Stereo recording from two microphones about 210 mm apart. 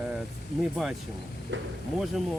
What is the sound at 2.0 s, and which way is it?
Speech, centre (ahead or behind).